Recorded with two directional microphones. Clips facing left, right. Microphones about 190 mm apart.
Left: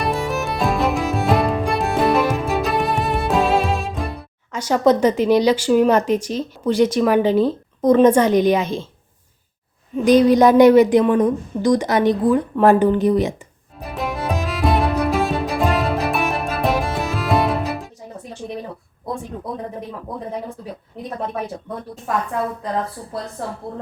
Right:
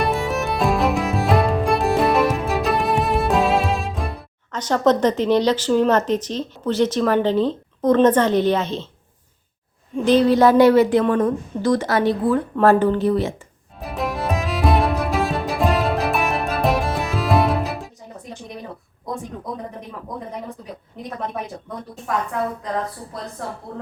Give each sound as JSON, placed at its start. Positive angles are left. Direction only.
{"t": 0.0, "sound": "music", "side_deg": 0}
{"t": 9.9, "sound": "a woman's voice", "side_deg": 15}
{"t": 13.7, "sound": "music", "side_deg": 0}